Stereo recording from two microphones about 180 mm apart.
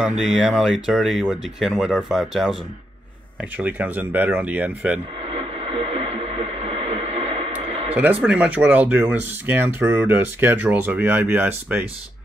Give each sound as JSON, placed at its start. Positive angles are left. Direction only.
{"t": 0.0, "sound": "speech", "side_deg": -5}
{"t": 5.3, "sound": "radio", "side_deg": -30}
{"t": 7.9, "sound": "speech", "side_deg": -10}